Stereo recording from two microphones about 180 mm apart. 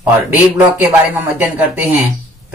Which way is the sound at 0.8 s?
10° right (ahead or behind).